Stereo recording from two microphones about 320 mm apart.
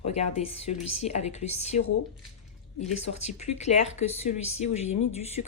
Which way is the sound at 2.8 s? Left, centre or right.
Left.